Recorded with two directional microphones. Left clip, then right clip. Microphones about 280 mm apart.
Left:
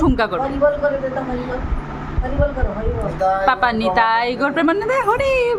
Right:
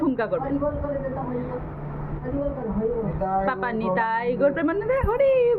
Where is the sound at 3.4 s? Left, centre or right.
Left.